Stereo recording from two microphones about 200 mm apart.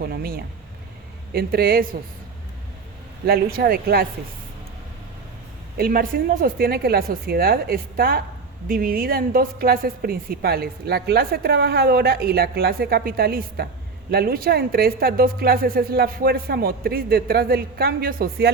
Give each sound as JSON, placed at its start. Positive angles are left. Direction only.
{"t": 0.0, "sound": "a sound", "side_deg": -50}
{"t": 1.3, "sound": "a woman's voice", "side_deg": -50}
{"t": 3.2, "sound": "a woman's voice", "side_deg": -50}
{"t": 5.7, "sound": "a woman's voice", "side_deg": -45}